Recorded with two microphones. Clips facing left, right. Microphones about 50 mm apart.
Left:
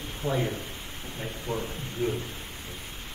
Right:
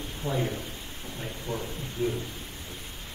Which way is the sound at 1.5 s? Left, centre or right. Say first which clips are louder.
Left 2 dB; left.